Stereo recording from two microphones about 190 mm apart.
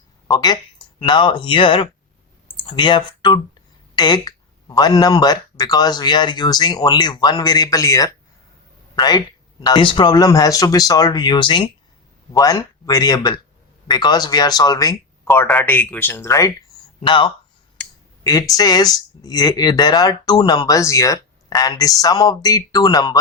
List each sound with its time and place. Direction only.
0.3 s speech: 20° left (ahead or behind)
17.1 s speech: 25° left (ahead or behind)